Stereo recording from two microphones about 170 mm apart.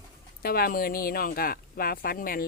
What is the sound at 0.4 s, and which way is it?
Speech, 65° left (ahead or behind).